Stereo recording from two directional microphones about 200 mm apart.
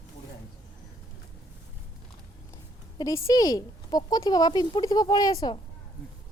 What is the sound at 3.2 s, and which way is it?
Speech, 20° left (ahead or behind).